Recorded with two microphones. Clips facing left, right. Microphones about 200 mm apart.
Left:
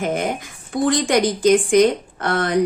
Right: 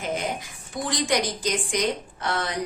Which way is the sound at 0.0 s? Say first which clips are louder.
Left 7 dB; 55° left (ahead or behind).